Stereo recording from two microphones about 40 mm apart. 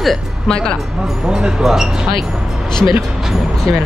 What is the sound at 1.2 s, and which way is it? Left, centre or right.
Speech, centre.